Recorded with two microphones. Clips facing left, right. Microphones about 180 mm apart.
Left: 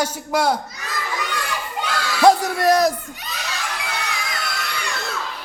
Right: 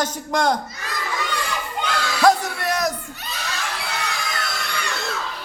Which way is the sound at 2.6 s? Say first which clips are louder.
Left 7 dB; 35° left (ahead or behind).